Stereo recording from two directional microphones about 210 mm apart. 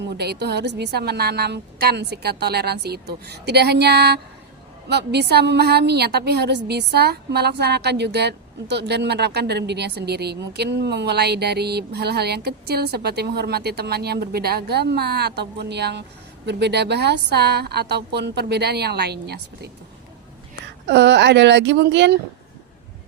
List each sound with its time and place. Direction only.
0.1 s a woman's voice: 50° right (ahead or behind)
20.8 s speech: 55° right (ahead or behind)